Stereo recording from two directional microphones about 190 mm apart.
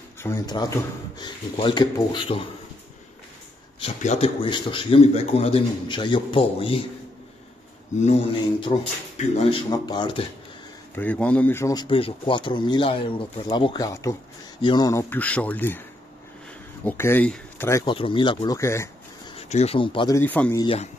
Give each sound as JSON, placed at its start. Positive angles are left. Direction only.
{"t": 0.2, "sound": "speech", "side_deg": 20}
{"t": 3.8, "sound": "speech", "side_deg": 35}
{"t": 8.0, "sound": "speech", "side_deg": 30}
{"t": 11.0, "sound": "speech", "side_deg": 10}
{"t": 16.8, "sound": "speech", "side_deg": 10}
{"t": 17.8, "sound": "speech", "side_deg": 25}
{"t": 19.3, "sound": "speech", "side_deg": 30}
{"t": 20.2, "sound": "speech", "side_deg": 10}
{"t": 20.5, "sound": "speech", "side_deg": 30}